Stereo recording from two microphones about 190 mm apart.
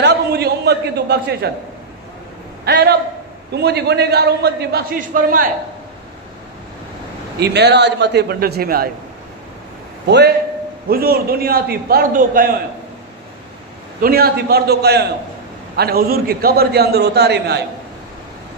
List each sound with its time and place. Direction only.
0.0 s a sound: 60° right (ahead or behind)
2.6 s a man's voice: 60° right (ahead or behind)
7.3 s a man's voice: 60° right (ahead or behind)
10.0 s a man's voice: 60° right (ahead or behind)
14.0 s a man's voice: 55° right (ahead or behind)